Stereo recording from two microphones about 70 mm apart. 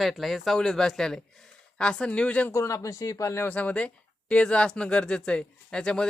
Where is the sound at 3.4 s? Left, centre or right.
Left.